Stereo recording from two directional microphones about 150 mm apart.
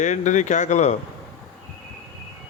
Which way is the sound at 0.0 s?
55° left (ahead or behind).